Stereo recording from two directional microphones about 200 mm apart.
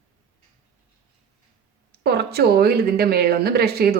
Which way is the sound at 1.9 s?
55° right (ahead or behind).